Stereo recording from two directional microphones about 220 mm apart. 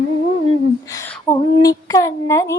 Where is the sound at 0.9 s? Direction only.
15° left (ahead or behind).